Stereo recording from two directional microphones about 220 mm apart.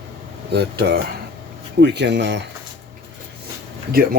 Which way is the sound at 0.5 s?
45° right (ahead or behind).